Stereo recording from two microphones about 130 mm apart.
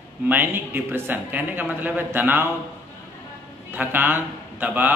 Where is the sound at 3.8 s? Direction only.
15° right (ahead or behind).